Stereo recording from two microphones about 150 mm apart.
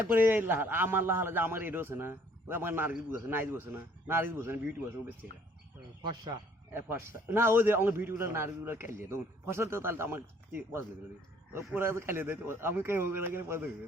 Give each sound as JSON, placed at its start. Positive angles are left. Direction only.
{"t": 0.1, "sound": "a man's voice", "side_deg": -10}
{"t": 6.0, "sound": "speech", "side_deg": -30}
{"t": 6.7, "sound": "a man's voice", "side_deg": -15}